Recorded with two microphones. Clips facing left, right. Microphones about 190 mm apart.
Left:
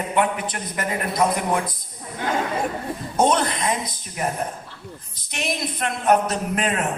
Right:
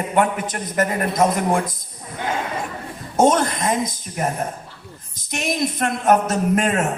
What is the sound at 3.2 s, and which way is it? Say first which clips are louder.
A man's voice: right 3 dB; 45° right (ahead or behind).